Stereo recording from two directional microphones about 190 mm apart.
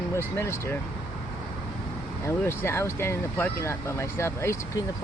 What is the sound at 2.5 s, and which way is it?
Speech, 15° left (ahead or behind).